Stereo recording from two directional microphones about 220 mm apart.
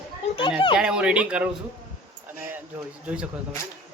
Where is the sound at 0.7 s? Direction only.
5° right (ahead or behind).